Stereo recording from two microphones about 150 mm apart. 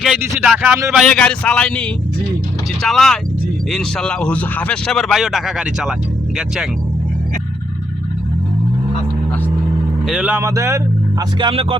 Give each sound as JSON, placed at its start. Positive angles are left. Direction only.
{"t": 0.2, "sound": "speech", "side_deg": -10}
{"t": 10.1, "sound": "speech", "side_deg": -5}
{"t": 10.4, "sound": "speech", "side_deg": -20}
{"t": 11.3, "sound": "music", "side_deg": -35}